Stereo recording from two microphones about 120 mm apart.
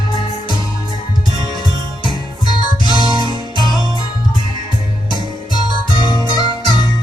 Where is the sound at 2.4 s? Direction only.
40° left (ahead or behind).